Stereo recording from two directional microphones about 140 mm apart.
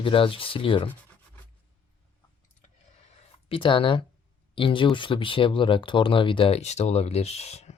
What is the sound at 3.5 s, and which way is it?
Speech, 40° left (ahead or behind).